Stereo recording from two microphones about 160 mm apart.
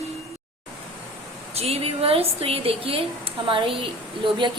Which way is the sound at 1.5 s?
40° right (ahead or behind).